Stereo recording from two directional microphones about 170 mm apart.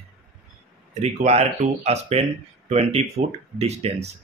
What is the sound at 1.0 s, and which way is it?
Speech, 40° right (ahead or behind).